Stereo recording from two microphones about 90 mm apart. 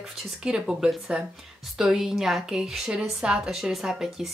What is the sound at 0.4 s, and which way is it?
A woman's voice, 10° right (ahead or behind).